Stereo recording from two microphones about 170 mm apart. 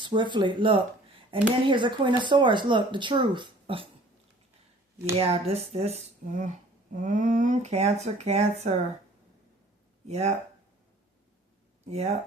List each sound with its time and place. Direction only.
0.0 s speech: 30° right (ahead or behind)
5.1 s speech: 35° right (ahead or behind)
10.1 s speech: 40° right (ahead or behind)
11.9 s speech: 40° right (ahead or behind)